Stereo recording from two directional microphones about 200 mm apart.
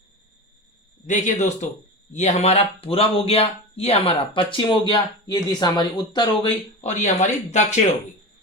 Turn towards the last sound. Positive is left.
turn(degrees=35)  # may be behind; listen again after turning